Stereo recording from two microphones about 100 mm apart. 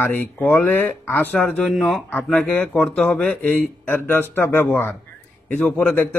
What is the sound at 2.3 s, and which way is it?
Speech, 15° left (ahead or behind).